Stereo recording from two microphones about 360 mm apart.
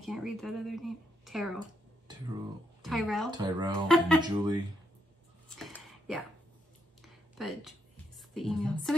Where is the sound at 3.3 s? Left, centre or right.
Centre.